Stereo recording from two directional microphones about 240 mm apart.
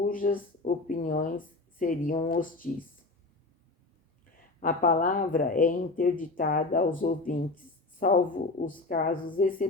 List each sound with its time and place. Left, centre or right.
0.0 s speech: left
4.4 s speech: left